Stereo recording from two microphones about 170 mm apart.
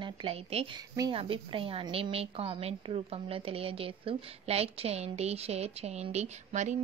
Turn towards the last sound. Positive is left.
turn(degrees=-40)  # may be behind; listen again after turning